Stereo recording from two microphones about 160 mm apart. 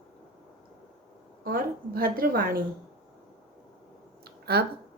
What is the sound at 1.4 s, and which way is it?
A woman's voice, 65° right (ahead or behind).